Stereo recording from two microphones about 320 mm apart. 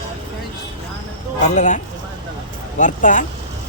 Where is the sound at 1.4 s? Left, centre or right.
Left.